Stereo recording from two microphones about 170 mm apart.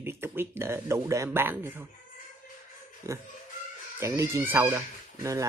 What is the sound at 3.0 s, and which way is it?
Speech, 15° right (ahead or behind).